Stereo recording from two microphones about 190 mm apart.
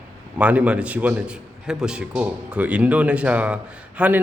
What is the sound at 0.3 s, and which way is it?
Speech, 5° right (ahead or behind).